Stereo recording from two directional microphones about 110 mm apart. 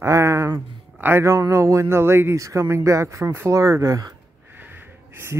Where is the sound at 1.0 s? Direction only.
25° right (ahead or behind).